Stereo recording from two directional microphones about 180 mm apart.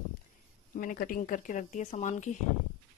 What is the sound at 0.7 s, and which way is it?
Speech, 50° left (ahead or behind).